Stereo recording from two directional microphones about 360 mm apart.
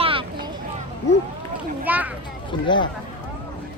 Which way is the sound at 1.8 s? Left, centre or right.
Centre.